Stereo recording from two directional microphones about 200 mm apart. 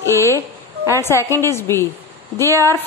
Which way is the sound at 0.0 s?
15° left (ahead or behind).